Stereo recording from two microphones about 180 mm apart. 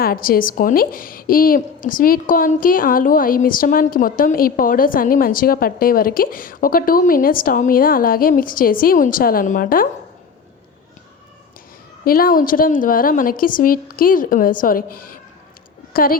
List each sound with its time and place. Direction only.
0.0 s a woman's voice: 55° left (ahead or behind)
12.0 s a woman's voice: 55° left (ahead or behind)